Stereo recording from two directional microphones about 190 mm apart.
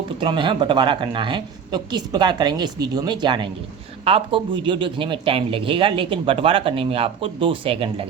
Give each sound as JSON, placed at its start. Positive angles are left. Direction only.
{"t": 0.2, "sound": "speech", "side_deg": -25}